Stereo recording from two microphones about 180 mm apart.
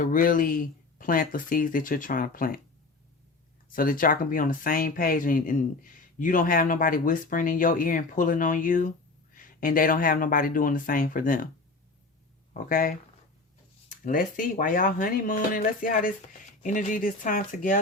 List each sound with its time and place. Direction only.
0.0 s speech: 50° left (ahead or behind)
3.7 s speech: 50° left (ahead or behind)
12.6 s speech: 50° left (ahead or behind)
14.0 s speech: 50° left (ahead or behind)